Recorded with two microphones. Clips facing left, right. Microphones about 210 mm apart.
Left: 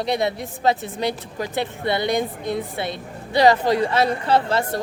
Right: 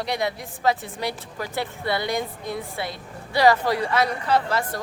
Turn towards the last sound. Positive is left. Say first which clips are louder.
# left 3 dB
turn(degrees=25)  # may be behind; listen again after turning